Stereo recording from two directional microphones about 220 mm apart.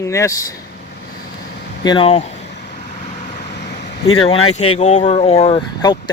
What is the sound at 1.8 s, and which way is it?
Speech, 20° left (ahead or behind).